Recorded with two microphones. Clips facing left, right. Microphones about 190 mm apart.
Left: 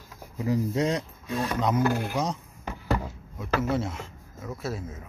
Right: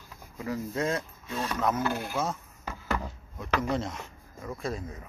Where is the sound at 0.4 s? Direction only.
20° left (ahead or behind).